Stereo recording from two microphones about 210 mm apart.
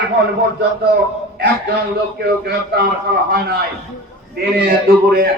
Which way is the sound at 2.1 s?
50° right (ahead or behind).